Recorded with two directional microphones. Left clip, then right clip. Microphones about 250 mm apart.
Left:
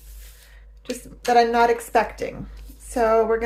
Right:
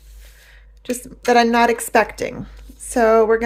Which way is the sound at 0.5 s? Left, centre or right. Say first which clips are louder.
Right 6 dB; right.